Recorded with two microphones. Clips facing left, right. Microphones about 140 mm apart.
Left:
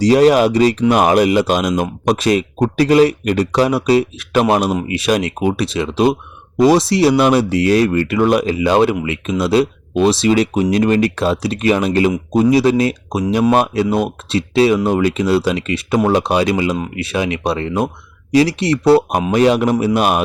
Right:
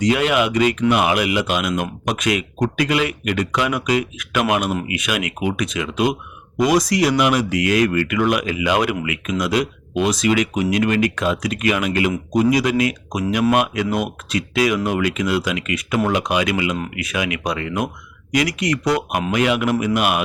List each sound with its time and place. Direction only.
0.0 s speech: 35° left (ahead or behind)